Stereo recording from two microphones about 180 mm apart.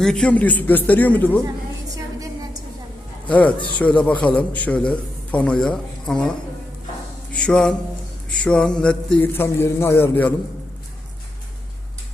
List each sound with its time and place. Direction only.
0.0 s a man's voice: 5° left (ahead or behind)
2.2 s a sound: 20° right (ahead or behind)
3.2 s a man's voice: 10° left (ahead or behind)
7.3 s a man's voice: 5° left (ahead or behind)